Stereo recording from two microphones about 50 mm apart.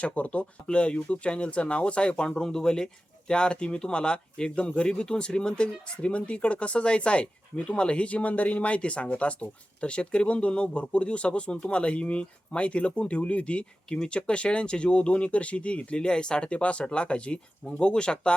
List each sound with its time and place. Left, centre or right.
0.0 s speech: left